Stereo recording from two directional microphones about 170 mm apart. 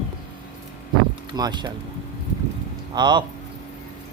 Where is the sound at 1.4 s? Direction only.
25° right (ahead or behind).